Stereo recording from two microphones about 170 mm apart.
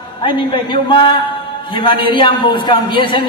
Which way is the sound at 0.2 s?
30° left (ahead or behind).